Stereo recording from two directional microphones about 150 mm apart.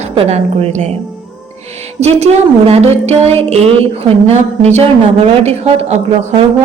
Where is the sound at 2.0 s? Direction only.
45° right (ahead or behind).